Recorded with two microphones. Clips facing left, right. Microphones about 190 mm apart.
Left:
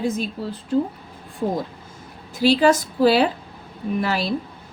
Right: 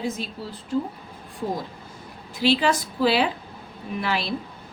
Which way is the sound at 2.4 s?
45° left (ahead or behind).